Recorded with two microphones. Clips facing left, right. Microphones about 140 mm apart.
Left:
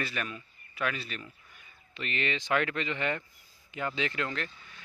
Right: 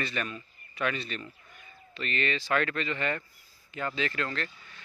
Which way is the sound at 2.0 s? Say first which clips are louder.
Right 2 dB; 15° left (ahead or behind).